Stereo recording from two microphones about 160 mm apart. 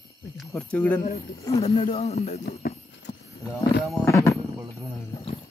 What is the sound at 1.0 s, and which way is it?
Speech, 65° left (ahead or behind).